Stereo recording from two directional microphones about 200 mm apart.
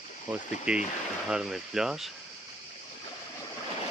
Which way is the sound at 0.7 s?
5° right (ahead or behind).